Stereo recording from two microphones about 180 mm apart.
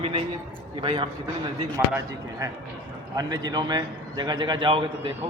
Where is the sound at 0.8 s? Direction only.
25° right (ahead or behind).